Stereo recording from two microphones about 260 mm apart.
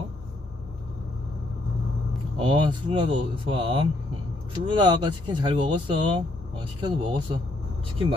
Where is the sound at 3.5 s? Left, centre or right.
Right.